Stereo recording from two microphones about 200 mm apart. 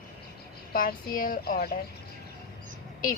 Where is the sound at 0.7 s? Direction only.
45° left (ahead or behind).